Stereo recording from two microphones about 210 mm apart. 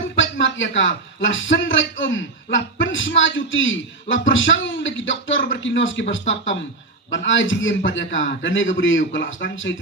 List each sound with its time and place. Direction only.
0.2 s a man's voice: 65° left (ahead or behind)